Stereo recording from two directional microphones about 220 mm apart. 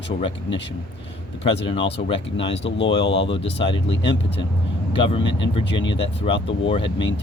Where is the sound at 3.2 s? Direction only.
25° left (ahead or behind).